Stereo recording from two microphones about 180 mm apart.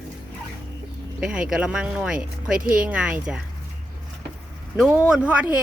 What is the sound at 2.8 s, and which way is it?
Speech, 5° right (ahead or behind).